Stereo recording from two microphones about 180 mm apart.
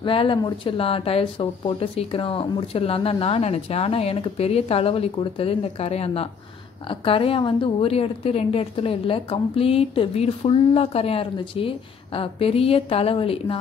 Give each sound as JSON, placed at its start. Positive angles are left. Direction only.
{"t": 0.0, "sound": "a woman's voice", "side_deg": 30}